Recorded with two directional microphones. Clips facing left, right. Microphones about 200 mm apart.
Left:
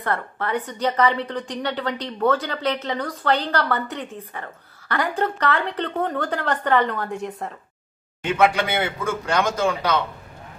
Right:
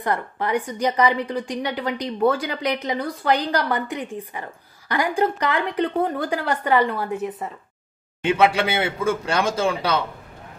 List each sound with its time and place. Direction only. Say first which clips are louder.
0.0 s a woman's voice: right 2 dB; 15° right (ahead or behind)
8.4 s a man's voice: left 1 dB; 25° right (ahead or behind)